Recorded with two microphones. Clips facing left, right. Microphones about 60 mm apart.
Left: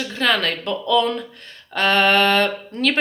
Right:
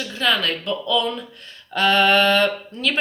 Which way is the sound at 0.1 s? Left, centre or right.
Left.